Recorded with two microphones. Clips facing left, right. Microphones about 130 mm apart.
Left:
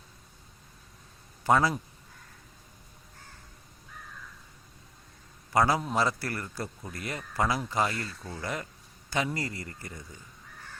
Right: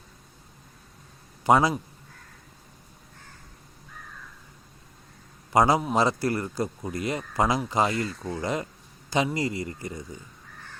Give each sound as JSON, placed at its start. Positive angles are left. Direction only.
{"t": 1.5, "sound": "a man's voice", "side_deg": -15}
{"t": 5.5, "sound": "a man's voice", "side_deg": -20}